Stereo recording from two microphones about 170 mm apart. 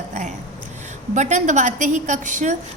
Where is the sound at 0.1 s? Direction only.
45° right (ahead or behind).